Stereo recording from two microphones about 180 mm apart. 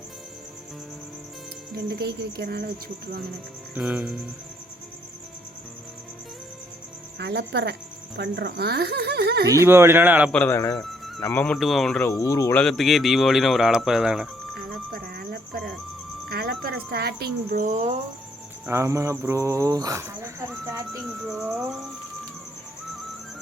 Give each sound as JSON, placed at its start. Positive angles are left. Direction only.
{"t": 1.7, "sound": "speech", "side_deg": -60}
{"t": 3.8, "sound": "speech", "side_deg": -5}
{"t": 7.2, "sound": "speech", "side_deg": -65}
{"t": 9.5, "sound": "speech", "side_deg": -15}
{"t": 10.3, "sound": "speech", "side_deg": 10}
{"t": 12.1, "sound": "speech", "side_deg": 20}
{"t": 12.5, "sound": "speech", "side_deg": 0}
{"t": 14.9, "sound": "music", "side_deg": -55}
{"t": 16.3, "sound": "speech", "side_deg": -55}
{"t": 18.6, "sound": "speech", "side_deg": -15}
{"t": 21.1, "sound": "speech", "side_deg": -5}